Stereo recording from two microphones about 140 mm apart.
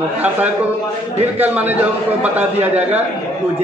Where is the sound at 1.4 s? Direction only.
15° right (ahead or behind).